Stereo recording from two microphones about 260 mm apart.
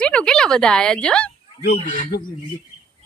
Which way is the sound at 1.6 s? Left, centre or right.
Left.